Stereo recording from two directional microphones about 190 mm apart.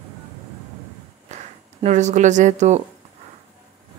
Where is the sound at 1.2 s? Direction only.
35° right (ahead or behind).